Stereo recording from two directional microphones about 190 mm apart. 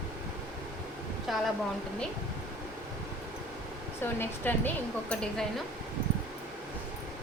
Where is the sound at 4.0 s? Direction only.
10° left (ahead or behind).